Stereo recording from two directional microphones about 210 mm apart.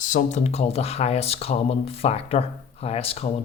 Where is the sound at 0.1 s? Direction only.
35° left (ahead or behind).